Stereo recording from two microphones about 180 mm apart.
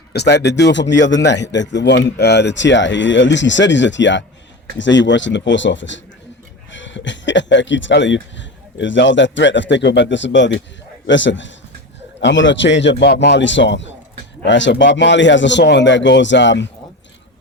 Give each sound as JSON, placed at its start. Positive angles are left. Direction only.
{"t": 0.1, "sound": "a man's voice", "side_deg": 70}